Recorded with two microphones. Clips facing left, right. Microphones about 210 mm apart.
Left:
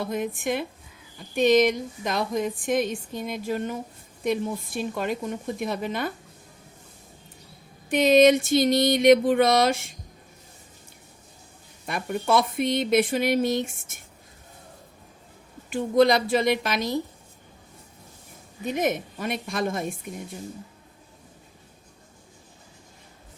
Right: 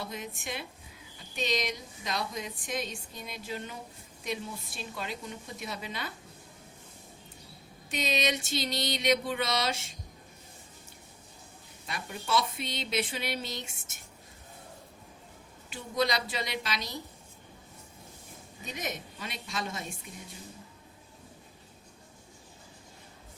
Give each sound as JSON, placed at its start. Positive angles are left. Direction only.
{"t": 0.0, "sound": "speech", "side_deg": 55}
{"t": 7.9, "sound": "speech", "side_deg": 55}
{"t": 11.9, "sound": "speech", "side_deg": 55}
{"t": 15.7, "sound": "speech", "side_deg": 50}
{"t": 18.6, "sound": "a woman's voice", "side_deg": 55}